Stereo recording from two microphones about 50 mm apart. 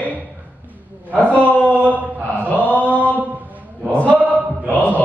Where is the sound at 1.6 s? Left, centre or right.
Right.